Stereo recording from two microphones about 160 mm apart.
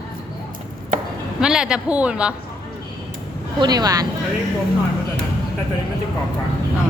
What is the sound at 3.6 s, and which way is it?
Speech, 25° right (ahead or behind).